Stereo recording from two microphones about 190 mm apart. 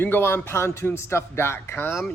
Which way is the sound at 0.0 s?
10° left (ahead or behind).